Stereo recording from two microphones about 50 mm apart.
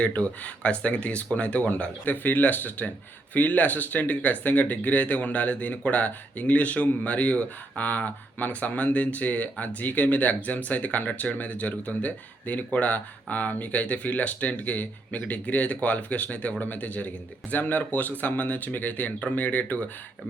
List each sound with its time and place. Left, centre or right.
0.0 s speech: left